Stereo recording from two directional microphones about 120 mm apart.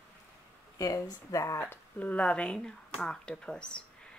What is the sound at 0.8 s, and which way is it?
Speech, 30° left (ahead or behind).